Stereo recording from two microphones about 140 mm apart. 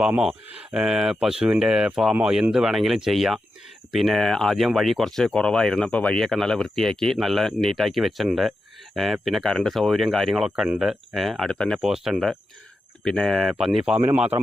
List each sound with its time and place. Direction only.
0.0 s a man's voice: 5° right (ahead or behind)